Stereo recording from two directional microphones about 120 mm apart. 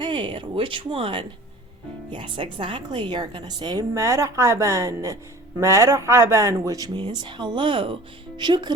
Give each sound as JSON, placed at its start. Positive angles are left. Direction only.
{"t": 0.0, "sound": "speech", "side_deg": -40}